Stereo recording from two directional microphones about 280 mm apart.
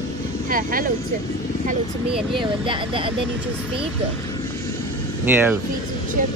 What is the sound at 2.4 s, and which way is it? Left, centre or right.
Speech, centre.